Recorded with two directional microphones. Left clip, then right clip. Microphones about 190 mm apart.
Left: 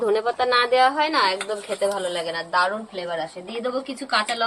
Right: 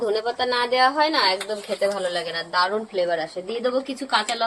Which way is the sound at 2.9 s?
Centre (ahead or behind).